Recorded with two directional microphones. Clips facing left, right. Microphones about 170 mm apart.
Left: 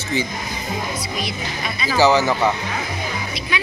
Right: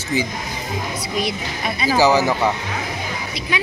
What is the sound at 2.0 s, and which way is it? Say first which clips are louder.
Speech: left 1 dB; 10° right (ahead or behind).